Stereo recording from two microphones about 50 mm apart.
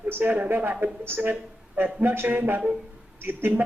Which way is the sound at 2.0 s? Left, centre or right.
Right.